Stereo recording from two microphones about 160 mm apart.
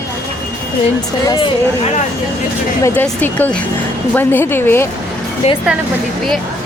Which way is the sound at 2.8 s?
10° left (ahead or behind).